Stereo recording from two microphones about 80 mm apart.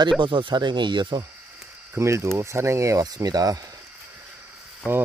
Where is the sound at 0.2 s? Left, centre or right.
Right.